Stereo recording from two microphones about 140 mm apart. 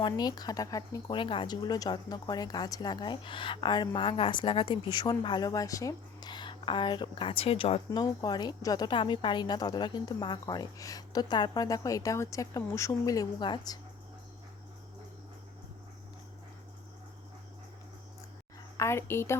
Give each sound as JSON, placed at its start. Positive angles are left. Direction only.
{"t": 0.0, "sound": "a woman's voice", "side_deg": 30}
{"t": 1.1, "sound": "a woman's voice", "side_deg": 35}
{"t": 7.9, "sound": "a woman's voice", "side_deg": 25}
{"t": 18.8, "sound": "a woman's voice", "side_deg": 20}